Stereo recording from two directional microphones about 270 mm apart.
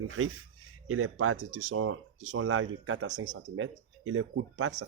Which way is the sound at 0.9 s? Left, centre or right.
Right.